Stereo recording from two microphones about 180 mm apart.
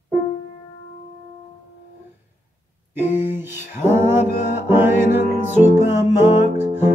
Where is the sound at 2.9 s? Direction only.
10° right (ahead or behind).